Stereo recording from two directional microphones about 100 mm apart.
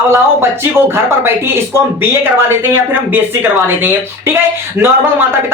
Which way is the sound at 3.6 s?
25° right (ahead or behind).